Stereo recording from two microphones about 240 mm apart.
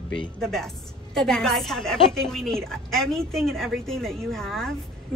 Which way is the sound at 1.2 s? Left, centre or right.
Centre.